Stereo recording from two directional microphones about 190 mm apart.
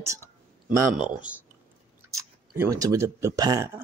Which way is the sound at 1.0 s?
5° right (ahead or behind).